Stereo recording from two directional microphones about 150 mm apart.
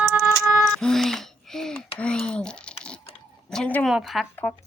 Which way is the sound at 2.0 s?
5° left (ahead or behind).